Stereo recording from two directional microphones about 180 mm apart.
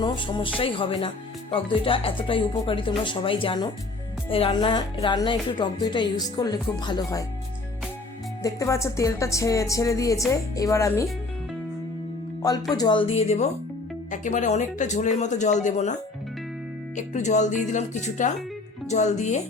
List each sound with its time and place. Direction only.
0.0 s speech: 25° left (ahead or behind)
8.4 s speech: 20° left (ahead or behind)
12.7 s speech: 25° left (ahead or behind); by 19.4 s 40° left (ahead or behind)